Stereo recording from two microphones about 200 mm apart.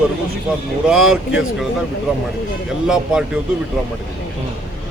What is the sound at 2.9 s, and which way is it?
Speech, 5° right (ahead or behind).